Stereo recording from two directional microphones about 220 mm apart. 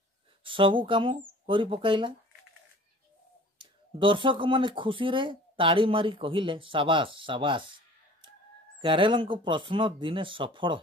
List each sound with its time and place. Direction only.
0.4 s speech: 25° right (ahead or behind)
3.5 s speech: 20° right (ahead or behind)
8.8 s speech: 20° right (ahead or behind)